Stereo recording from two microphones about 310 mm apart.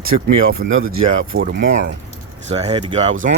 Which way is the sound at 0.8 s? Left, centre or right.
Right.